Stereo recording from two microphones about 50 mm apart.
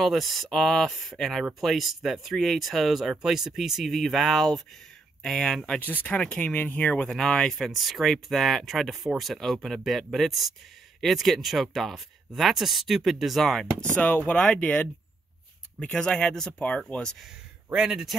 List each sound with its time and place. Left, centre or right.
0.0 s speech: centre
3.8 s speech: centre
6.0 s speech: left
6.4 s speech: left
7.1 s speech: centre
7.5 s speech: centre
14.1 s speech: left
14.4 s speech: left
16.5 s speech: left
17.7 s speech: right